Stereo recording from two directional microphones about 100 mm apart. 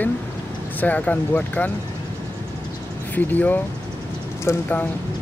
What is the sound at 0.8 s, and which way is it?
Speech, 15° left (ahead or behind).